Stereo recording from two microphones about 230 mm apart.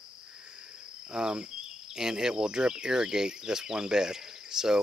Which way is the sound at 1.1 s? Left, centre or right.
Centre.